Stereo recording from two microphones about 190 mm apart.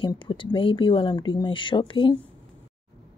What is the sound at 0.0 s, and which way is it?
Speech, 25° left (ahead or behind).